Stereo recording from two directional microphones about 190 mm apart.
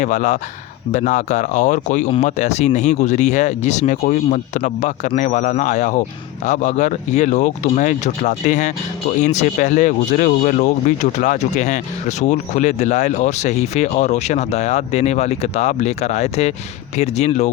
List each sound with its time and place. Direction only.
0.0 s speech: 40° left (ahead or behind)